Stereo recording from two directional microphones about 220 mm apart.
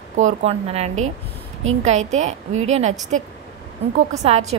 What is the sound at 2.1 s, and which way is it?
A woman's voice, 30° right (ahead or behind).